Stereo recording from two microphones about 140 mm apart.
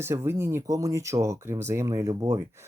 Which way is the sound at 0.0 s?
20° right (ahead or behind).